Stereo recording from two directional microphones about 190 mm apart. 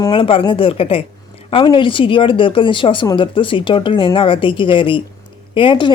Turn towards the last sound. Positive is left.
turn(degrees=25)  # may be behind; listen again after turning